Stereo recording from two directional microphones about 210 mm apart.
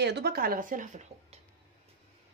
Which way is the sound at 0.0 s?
50° right (ahead or behind).